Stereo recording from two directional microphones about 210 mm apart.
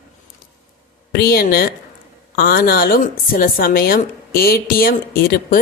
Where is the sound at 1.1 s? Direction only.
50° left (ahead or behind).